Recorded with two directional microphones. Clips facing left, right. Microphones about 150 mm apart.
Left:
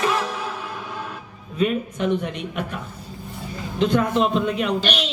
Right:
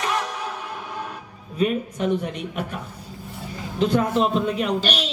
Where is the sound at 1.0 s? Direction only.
35° right (ahead or behind).